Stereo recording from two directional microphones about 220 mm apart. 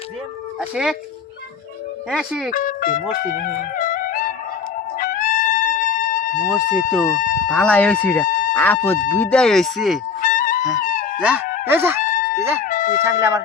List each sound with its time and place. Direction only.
0.8 s speech: centre (ahead or behind)
2.0 s speech: centre (ahead or behind)
2.5 s speech: 40° left (ahead or behind)
3.3 s music: 40° left (ahead or behind)
6.7 s speech: 40° left (ahead or behind)
7.5 s speech: 5° left (ahead or behind)
8.3 s a sound: 40° left (ahead or behind)
8.5 s speech: 10° left (ahead or behind)
10.2 s music: 40° left (ahead or behind)
10.8 s a sound: 35° left (ahead or behind)
11.2 s speech: 5° right (ahead or behind)
12.0 s chicken: 35° left (ahead or behind)
12.6 s a sound: 35° left (ahead or behind)
13.0 s speech: 10° right (ahead or behind)